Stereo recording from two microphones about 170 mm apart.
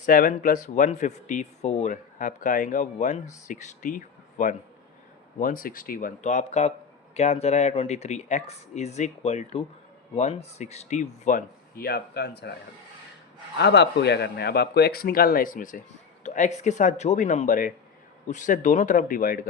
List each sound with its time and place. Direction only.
0.0 s speech: 55° left (ahead or behind); by 12.5 s 70° left (ahead or behind)
13.6 s speech: 90° left; by 19.5 s 55° left (ahead or behind)